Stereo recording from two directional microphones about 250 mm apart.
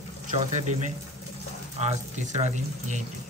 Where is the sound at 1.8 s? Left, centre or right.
Right.